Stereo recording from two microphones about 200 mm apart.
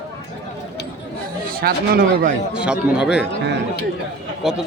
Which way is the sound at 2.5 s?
5° right (ahead or behind).